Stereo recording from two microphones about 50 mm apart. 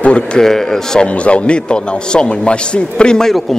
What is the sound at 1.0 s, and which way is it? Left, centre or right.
A man's voice, left.